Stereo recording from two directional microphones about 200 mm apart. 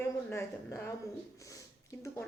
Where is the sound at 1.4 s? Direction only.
15° left (ahead or behind).